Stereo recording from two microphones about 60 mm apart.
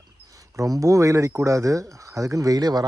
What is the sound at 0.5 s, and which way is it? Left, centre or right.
Speech, right.